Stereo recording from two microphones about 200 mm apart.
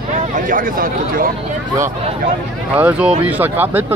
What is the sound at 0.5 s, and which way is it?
Speech, 45° right (ahead or behind).